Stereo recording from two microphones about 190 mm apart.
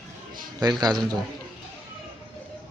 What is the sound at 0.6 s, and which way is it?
Speech, 20° right (ahead or behind).